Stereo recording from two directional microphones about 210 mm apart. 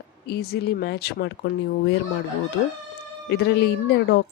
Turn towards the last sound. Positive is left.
turn(degrees=50)  # may be behind; listen again after turning